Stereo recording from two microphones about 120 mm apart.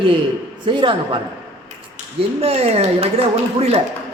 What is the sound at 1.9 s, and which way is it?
Speech, 60° right (ahead or behind).